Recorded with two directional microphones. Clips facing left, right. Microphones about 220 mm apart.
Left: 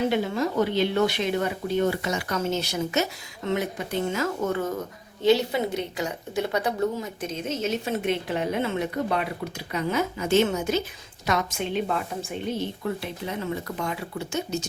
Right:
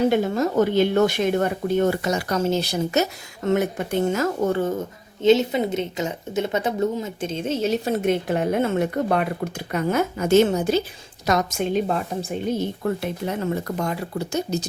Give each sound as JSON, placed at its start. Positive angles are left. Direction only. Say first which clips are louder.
{"t": 0.1, "sound": "a woman's voice", "louder": "right 4 dB", "side_deg": -45}